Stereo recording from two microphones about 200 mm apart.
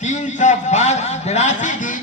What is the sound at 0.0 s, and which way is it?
A man's voice, 35° left (ahead or behind).